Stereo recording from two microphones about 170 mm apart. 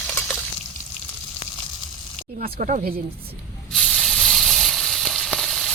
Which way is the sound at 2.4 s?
50° right (ahead or behind).